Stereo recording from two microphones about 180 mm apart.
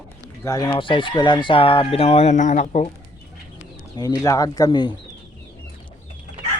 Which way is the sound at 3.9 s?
20° left (ahead or behind).